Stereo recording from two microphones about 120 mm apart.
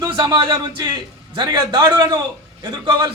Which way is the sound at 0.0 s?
35° right (ahead or behind).